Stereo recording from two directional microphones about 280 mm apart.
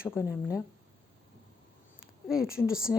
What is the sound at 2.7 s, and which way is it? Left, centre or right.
Speech, centre.